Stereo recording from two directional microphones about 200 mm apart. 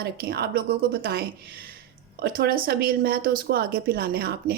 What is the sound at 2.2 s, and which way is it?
Speech, 50° right (ahead or behind).